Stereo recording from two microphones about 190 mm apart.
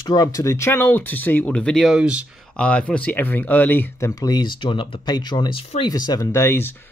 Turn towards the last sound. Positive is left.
turn(degrees=10)  # may be behind; listen again after turning